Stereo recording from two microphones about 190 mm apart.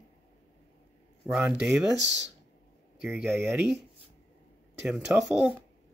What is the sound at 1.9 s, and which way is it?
Speech, 65° right (ahead or behind).